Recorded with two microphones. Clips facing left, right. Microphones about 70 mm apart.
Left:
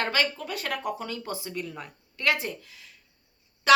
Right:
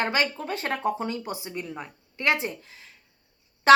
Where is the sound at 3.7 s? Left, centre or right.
Right.